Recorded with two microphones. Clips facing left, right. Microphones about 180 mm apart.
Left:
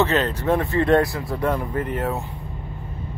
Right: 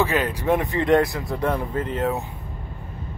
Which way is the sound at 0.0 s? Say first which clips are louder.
Left 2 dB; 10° right (ahead or behind).